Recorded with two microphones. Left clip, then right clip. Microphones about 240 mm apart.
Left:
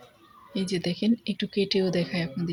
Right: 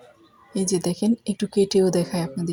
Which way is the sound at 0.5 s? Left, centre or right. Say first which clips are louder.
Right 5 dB; centre.